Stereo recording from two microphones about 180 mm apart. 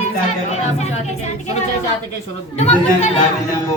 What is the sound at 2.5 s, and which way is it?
Speech, 40° left (ahead or behind).